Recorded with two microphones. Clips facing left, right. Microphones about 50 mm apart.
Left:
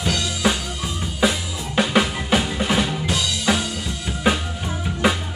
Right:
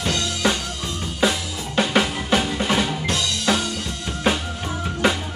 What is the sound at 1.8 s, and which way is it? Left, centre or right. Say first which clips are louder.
Drum: left 1 dB; centre.